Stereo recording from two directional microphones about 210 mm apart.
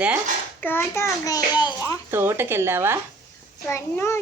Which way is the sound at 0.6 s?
10° left (ahead or behind).